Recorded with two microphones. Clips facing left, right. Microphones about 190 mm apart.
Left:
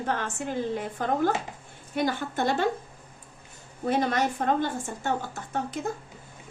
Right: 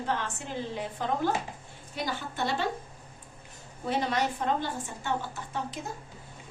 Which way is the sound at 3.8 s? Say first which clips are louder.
Left 4 dB; 50° left (ahead or behind).